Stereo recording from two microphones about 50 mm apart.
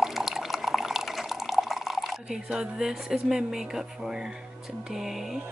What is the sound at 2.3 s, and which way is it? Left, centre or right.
Speech, centre.